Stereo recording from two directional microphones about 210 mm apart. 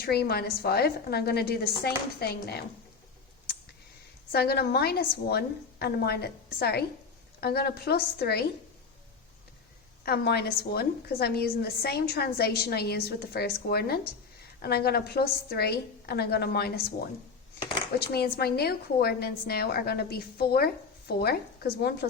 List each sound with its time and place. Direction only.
0.0 s a woman's voice: 50° left (ahead or behind)
4.3 s a woman's voice: 50° left (ahead or behind)
10.0 s a woman's voice: 45° left (ahead or behind)
18.0 s a woman's voice: 50° left (ahead or behind)